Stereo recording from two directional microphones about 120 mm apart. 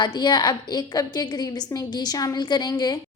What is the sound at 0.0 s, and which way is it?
A woman's voice, 35° left (ahead or behind).